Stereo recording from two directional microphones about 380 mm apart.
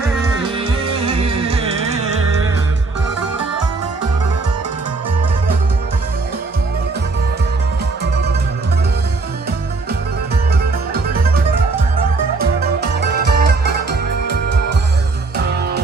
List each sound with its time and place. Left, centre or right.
0.9 s music: centre
12.4 s music: right